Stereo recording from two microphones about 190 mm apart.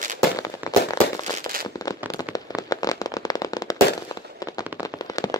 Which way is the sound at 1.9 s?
20° left (ahead or behind).